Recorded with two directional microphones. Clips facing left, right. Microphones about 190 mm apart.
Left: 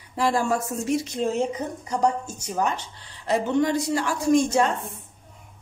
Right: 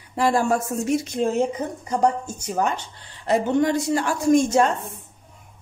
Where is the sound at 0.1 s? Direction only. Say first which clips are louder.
Right 3 dB; 55° right (ahead or behind).